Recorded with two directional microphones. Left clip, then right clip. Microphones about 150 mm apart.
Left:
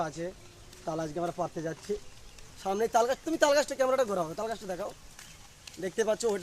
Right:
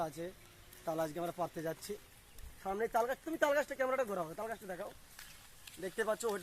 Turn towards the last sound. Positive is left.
turn(degrees=15)  # may be behind; listen again after turning